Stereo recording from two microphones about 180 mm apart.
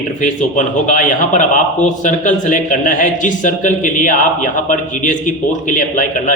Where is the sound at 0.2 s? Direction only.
45° left (ahead or behind).